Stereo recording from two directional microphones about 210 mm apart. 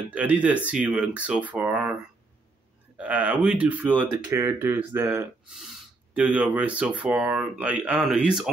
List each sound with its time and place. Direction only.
0.1 s speech: 5° right (ahead or behind)
3.0 s speech: 5° right (ahead or behind)